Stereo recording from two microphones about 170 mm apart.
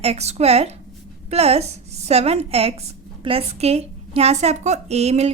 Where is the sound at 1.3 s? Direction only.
35° right (ahead or behind).